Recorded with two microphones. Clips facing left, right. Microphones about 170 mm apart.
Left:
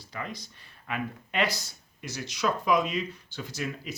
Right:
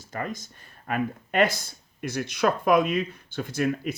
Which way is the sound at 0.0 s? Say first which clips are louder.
Right 5 dB; 45° right (ahead or behind).